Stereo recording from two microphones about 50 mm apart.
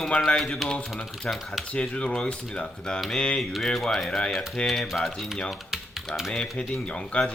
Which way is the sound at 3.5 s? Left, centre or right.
Centre.